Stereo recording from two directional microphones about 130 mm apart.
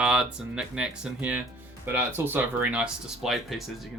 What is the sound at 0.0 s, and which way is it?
Speech, 10° right (ahead or behind).